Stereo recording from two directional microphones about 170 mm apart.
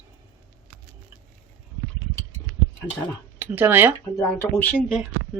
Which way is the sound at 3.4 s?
10° right (ahead or behind).